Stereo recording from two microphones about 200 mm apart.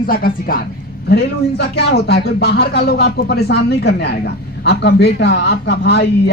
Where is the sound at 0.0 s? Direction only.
45° left (ahead or behind).